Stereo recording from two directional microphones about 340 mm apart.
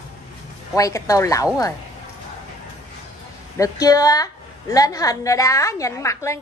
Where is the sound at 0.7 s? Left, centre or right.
Centre.